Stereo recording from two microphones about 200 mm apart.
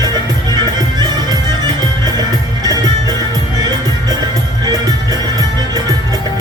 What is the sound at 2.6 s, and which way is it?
Music, 20° right (ahead or behind).